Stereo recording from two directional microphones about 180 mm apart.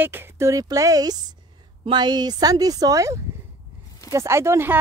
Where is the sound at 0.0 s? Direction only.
10° right (ahead or behind).